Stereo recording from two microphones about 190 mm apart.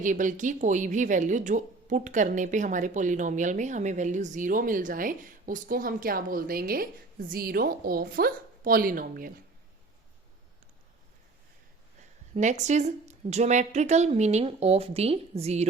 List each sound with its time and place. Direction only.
0.0 s speech: 40° right (ahead or behind)
12.3 s a woman's voice: 40° right (ahead or behind)